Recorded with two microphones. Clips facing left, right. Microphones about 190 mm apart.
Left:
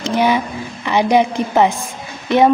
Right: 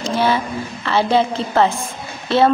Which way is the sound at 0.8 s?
15° left (ahead or behind).